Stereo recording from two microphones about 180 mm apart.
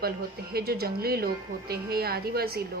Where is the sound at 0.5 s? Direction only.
60° right (ahead or behind).